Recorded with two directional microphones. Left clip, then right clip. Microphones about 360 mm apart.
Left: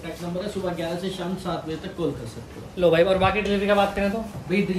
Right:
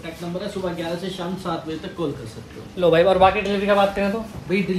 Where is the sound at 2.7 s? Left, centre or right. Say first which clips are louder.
Right 3 dB; centre.